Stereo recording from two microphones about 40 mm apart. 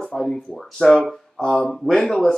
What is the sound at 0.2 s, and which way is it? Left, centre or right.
Speech, centre.